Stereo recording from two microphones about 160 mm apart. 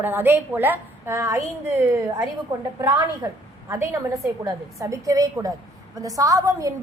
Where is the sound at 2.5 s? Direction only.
20° right (ahead or behind).